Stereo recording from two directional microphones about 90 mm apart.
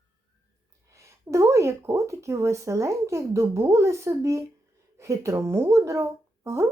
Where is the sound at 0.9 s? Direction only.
35° right (ahead or behind).